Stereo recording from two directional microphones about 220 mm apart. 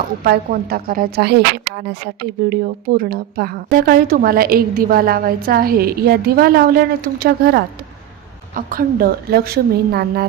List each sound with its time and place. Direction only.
0.3 s a woman's voice: 40° right (ahead or behind)